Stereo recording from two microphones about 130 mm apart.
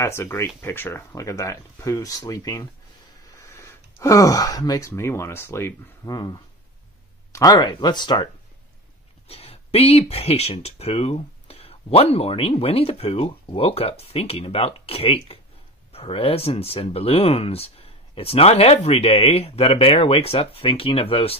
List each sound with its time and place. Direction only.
0.0 s speech: 20° left (ahead or behind)
9.3 s speech: 50° left (ahead or behind)